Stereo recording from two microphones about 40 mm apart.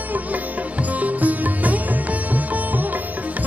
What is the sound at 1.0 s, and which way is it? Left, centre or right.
Music, right.